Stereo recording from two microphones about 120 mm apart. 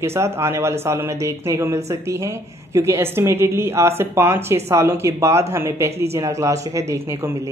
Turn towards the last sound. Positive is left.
turn(degrees=-25)  # may be behind; listen again after turning